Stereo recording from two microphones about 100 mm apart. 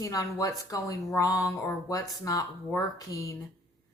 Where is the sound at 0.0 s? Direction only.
35° left (ahead or behind).